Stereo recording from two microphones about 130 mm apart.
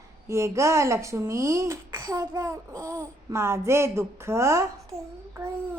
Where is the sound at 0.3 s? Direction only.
20° right (ahead or behind).